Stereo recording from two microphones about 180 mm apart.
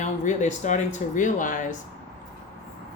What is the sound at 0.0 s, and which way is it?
Speech, 45° left (ahead or behind).